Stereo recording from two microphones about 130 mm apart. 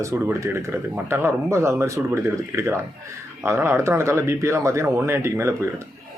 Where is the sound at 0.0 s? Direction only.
20° right (ahead or behind).